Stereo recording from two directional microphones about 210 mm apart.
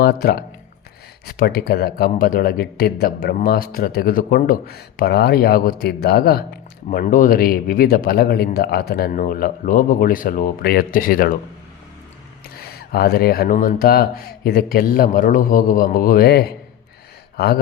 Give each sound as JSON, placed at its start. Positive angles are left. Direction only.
{"t": 0.0, "sound": "speech", "side_deg": 50}
{"t": 12.5, "sound": "speech", "side_deg": 45}